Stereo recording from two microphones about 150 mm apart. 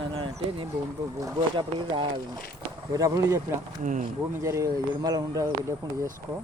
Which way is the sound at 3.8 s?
60° right (ahead or behind).